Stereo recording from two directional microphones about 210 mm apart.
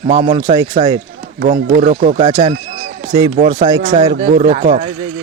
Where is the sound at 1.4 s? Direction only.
55° right (ahead or behind).